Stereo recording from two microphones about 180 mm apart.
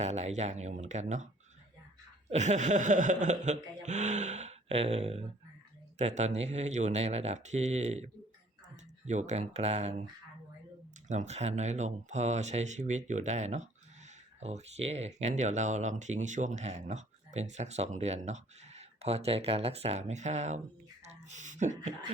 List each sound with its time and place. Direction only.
0.0 s speech: 40° right (ahead or behind)
2.3 s speech: 40° right (ahead or behind)
11.1 s speech: 40° right (ahead or behind)